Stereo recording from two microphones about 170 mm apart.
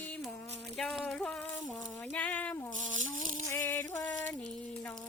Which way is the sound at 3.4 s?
15° left (ahead or behind).